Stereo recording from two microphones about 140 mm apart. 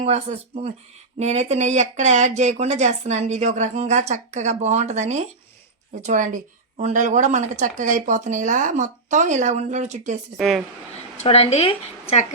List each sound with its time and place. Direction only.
0.0 s speech: 50° right (ahead or behind)
10.3 s a woman's voice: centre (ahead or behind)
11.2 s speech: 45° left (ahead or behind)